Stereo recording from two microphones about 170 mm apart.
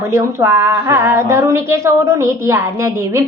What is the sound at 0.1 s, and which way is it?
A woman's voice, 15° right (ahead or behind).